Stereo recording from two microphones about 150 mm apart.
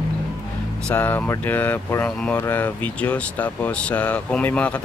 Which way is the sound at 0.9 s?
10° left (ahead or behind).